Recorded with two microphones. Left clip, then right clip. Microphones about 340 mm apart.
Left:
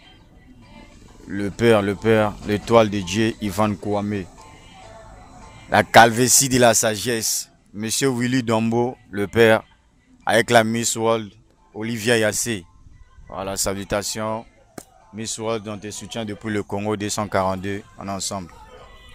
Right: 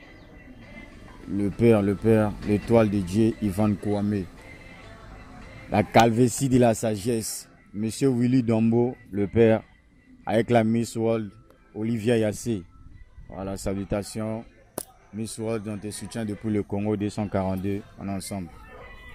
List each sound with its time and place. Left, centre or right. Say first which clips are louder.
1.3 s speech: left 4 dB; left
5.7 s speech: left 7 dB; left
8.7 s speech: left 2 dB; left
9.1 s speech: left 5 dB; left